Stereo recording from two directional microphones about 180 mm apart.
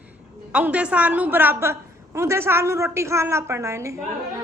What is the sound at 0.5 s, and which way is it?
A woman's voice, 5° right (ahead or behind).